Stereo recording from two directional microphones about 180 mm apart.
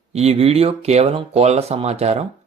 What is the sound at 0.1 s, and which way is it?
Speech, 35° right (ahead or behind).